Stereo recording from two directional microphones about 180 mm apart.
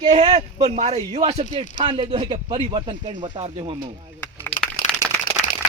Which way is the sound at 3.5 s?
25° right (ahead or behind).